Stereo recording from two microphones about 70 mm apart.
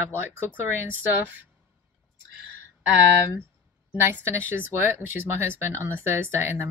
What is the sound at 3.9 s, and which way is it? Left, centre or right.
A woman's voice, right.